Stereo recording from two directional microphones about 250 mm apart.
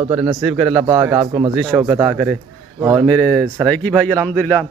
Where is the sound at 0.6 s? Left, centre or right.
Centre.